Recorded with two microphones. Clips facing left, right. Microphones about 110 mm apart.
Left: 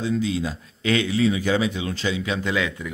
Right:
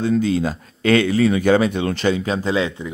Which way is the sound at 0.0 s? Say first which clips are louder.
Right 6 dB; 50° right (ahead or behind).